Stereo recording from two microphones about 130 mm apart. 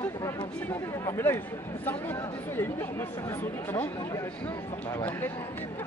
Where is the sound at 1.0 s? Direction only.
20° left (ahead or behind).